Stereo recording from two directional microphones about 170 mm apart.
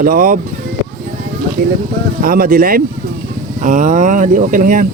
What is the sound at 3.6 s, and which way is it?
Speech, 50° right (ahead or behind).